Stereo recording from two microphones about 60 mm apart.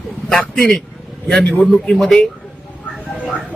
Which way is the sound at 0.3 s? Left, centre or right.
Centre.